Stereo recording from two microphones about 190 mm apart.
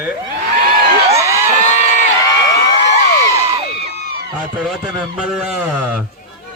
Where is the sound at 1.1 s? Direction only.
15° right (ahead or behind).